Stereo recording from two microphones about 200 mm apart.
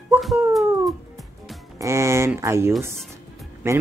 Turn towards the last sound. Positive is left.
turn(degrees=-15)  # may be behind; listen again after turning